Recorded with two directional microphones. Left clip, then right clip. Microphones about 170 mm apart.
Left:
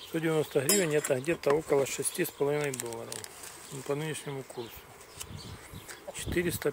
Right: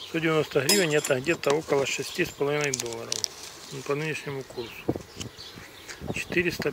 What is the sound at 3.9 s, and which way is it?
Speech, 15° left (ahead or behind).